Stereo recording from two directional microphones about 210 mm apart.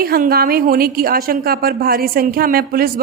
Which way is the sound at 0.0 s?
45° right (ahead or behind).